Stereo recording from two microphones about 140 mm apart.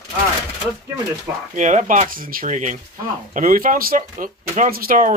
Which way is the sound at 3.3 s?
75° right (ahead or behind).